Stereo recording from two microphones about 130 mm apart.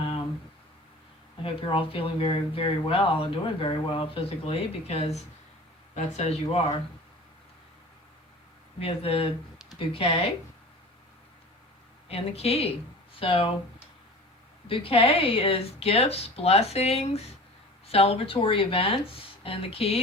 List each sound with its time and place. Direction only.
1.7 s speech: 40° left (ahead or behind)
8.8 s speech: 50° left (ahead or behind)
12.0 s speech: 50° left (ahead or behind)
14.7 s speech: 45° left (ahead or behind)